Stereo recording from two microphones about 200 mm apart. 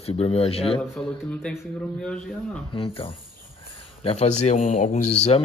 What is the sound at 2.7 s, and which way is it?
A man's voice, 25° left (ahead or behind).